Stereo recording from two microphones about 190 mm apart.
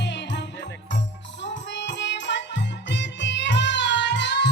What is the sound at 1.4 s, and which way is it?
Music, 70° left (ahead or behind).